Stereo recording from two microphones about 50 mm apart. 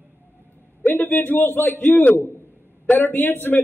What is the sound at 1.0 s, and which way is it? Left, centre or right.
A man's voice, left.